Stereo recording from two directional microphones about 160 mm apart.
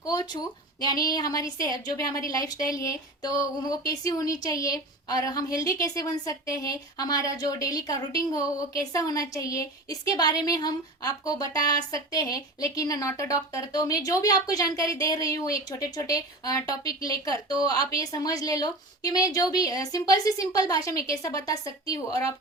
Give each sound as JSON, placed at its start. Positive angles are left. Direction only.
{"t": 0.0, "sound": "a woman's voice", "side_deg": 25}